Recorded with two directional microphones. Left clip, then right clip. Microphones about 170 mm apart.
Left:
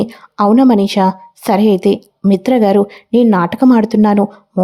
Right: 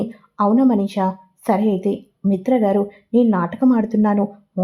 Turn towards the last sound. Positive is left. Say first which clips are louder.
# left 7 dB
turn(degrees=45)  # may be behind; listen again after turning